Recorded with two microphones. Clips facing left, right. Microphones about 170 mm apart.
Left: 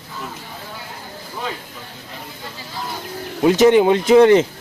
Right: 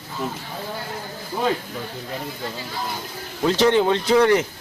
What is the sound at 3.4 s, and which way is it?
Speech, 15° left (ahead or behind).